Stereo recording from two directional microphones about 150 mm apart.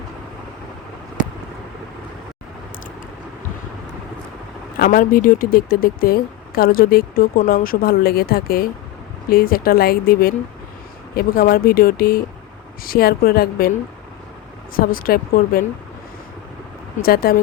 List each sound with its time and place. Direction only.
4.8 s a woman's voice: 70° left (ahead or behind)
14.8 s speech: 75° left (ahead or behind)
17.0 s a woman's voice: 80° left